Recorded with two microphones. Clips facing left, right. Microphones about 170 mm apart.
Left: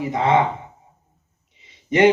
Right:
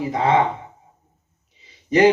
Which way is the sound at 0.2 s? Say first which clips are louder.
Even; 25° left (ahead or behind).